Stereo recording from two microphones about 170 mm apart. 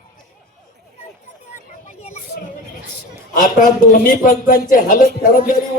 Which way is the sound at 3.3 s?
50° left (ahead or behind).